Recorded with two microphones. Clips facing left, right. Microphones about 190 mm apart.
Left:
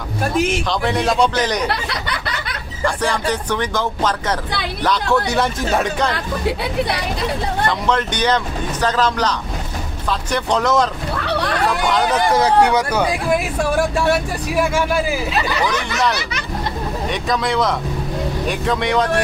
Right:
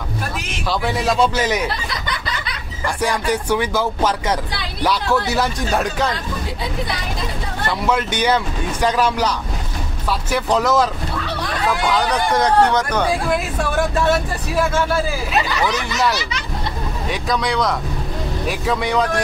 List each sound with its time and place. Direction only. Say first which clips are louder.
0.7 s speech: left 1 dB; centre (ahead or behind)
1.7 s a sound: left 2 dB; 65° left (ahead or behind)
2.8 s speech: left 1 dB; 10° right (ahead or behind)
6.1 s speech: left 5 dB; 65° left (ahead or behind)
7.6 s speech: right 1 dB; 5° right (ahead or behind)
10.3 s speech: even; centre (ahead or behind)
11.2 s a sound: left 5 dB; 65° left (ahead or behind)
11.9 s speech: left 3 dB; 5° left (ahead or behind)
17.1 s speech: even; centre (ahead or behind)